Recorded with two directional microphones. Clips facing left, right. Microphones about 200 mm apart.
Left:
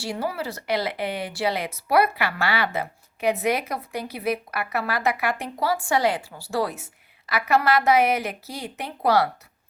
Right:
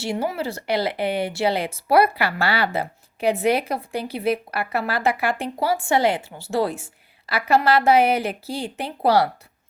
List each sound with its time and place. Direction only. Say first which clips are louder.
0.0 s speech: right 3 dB; 25° right (ahead or behind)